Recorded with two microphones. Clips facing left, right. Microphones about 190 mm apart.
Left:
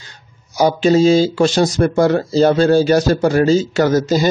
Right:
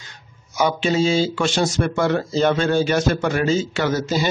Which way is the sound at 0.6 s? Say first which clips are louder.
Left 7 dB; 40° left (ahead or behind).